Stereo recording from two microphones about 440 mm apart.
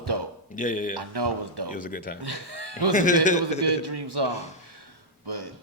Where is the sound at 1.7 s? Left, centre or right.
Centre.